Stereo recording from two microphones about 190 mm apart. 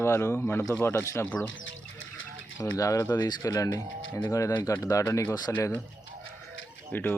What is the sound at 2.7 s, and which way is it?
Speech, 15° left (ahead or behind).